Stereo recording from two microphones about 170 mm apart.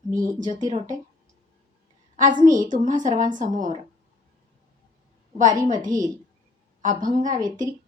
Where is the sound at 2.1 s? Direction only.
50° right (ahead or behind).